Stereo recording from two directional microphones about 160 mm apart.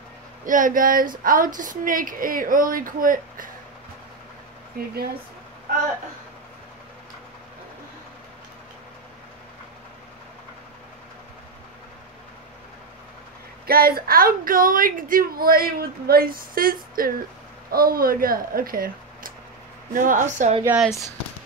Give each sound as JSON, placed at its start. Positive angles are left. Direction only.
{"t": 0.5, "sound": "a woman's voice", "side_deg": -55}
{"t": 4.7, "sound": "speech", "side_deg": -70}
{"t": 13.7, "sound": "a woman's voice", "side_deg": -70}